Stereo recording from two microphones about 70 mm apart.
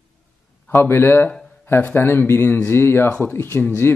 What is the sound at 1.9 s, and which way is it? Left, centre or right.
Speech, left.